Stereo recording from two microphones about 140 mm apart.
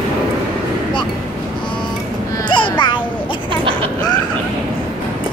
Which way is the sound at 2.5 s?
35° left (ahead or behind).